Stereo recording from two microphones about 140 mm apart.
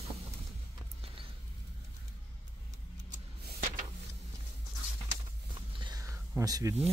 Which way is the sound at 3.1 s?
70° right (ahead or behind).